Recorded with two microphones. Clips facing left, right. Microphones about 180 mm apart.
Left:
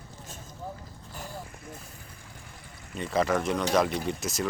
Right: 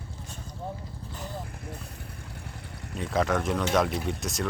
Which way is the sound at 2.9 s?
Centre (ahead or behind).